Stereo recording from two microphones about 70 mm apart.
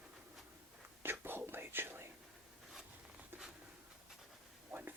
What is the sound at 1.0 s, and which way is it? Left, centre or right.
Whispering, right.